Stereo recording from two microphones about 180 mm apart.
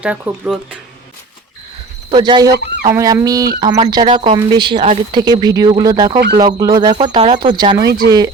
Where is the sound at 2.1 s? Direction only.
25° right (ahead or behind).